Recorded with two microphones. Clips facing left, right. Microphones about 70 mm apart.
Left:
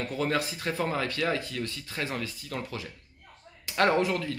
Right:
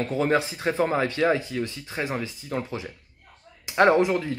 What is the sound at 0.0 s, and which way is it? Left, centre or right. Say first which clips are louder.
Speech: right 6 dB; right.